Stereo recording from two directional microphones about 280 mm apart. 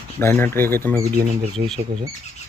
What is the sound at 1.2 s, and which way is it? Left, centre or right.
Speech, right.